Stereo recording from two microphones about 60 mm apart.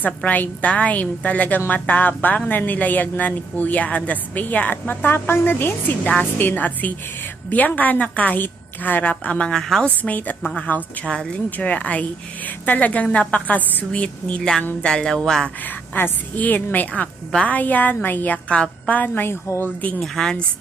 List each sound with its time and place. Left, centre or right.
0.3 s a woman's voice: left
9.5 s a woman's voice: centre
9.8 s a woman's voice: left
11.0 s music: centre
11.5 s a woman's voice: left
14.8 s music: centre
15.6 s a woman's voice: left
20.0 s music: centre